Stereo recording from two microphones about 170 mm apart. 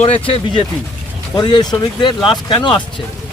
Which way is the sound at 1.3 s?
25° left (ahead or behind).